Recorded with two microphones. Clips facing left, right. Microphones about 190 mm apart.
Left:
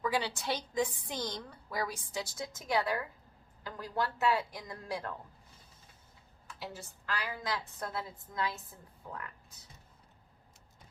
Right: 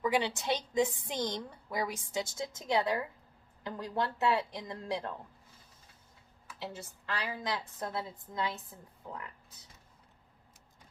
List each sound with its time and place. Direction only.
0.0 s a woman's voice: 20° right (ahead or behind)
6.6 s a woman's voice: 20° right (ahead or behind)